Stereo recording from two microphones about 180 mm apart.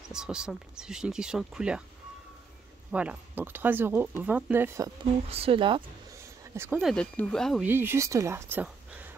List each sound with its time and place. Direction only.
0.1 s speech: 5° right (ahead or behind)
2.9 s speech: 5° right (ahead or behind)
5.3 s speech: 30° right (ahead or behind)
6.5 s speech: 15° right (ahead or behind)
6.8 s speech: 5° left (ahead or behind)
7.6 s speech: 10° right (ahead or behind)